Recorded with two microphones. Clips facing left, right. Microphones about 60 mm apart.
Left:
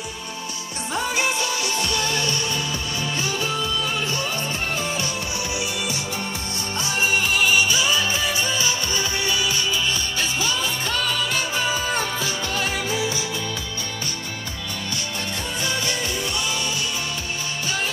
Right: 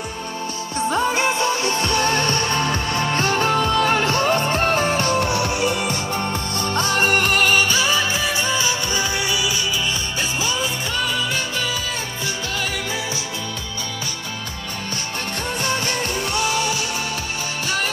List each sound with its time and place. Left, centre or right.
0.7 s music: right; by 9.5 s centre
15.6 s music: right